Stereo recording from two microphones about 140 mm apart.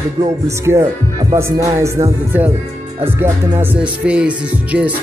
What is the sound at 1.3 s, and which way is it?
Music, 20° right (ahead or behind).